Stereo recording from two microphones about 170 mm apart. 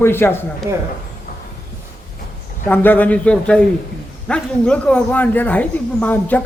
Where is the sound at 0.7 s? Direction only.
20° right (ahead or behind).